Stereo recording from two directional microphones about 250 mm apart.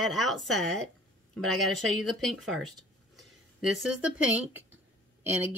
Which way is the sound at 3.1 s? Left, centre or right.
Centre.